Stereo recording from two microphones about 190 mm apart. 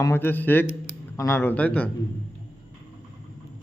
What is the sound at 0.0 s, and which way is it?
A man's voice, 10° left (ahead or behind).